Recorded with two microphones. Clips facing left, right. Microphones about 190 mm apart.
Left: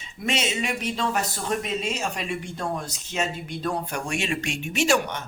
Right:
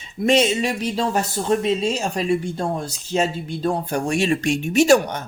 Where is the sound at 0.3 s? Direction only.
35° right (ahead or behind).